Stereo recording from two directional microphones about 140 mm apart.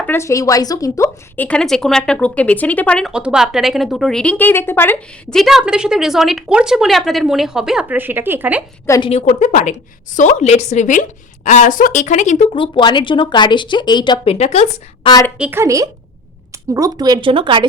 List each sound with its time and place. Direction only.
0.0 s speech: 20° left (ahead or behind)
1.5 s speech: 5° left (ahead or behind)
3.1 s speech: 5° right (ahead or behind); by 5.0 s 15° left (ahead or behind)
5.3 s speech: centre (ahead or behind)
9.0 s a woman's voice: 45° left (ahead or behind)
12.5 s speech: 35° left (ahead or behind)
14.3 s a woman's voice: 50° left (ahead or behind)
15.4 s a woman's voice: 15° right (ahead or behind); by 17.7 s 35° right (ahead or behind)